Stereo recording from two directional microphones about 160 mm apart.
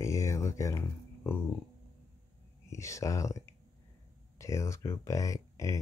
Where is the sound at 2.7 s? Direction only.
20° left (ahead or behind).